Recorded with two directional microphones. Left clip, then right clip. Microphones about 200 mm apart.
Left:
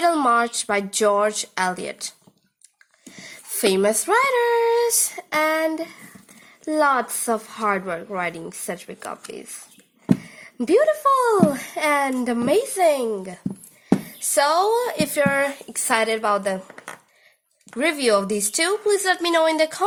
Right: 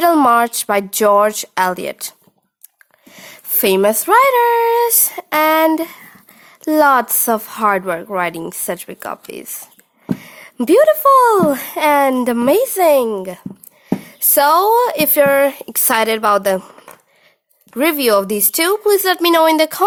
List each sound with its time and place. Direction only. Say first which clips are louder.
0.0 s speech: right 7 dB; 40° right (ahead or behind)
17.7 s speech: right 6 dB; 45° right (ahead or behind)